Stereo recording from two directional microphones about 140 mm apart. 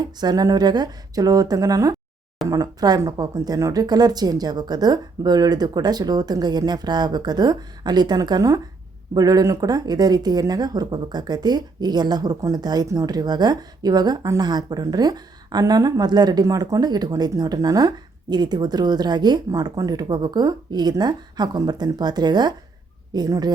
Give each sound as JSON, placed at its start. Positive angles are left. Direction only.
{"t": 0.0, "sound": "speech", "side_deg": -30}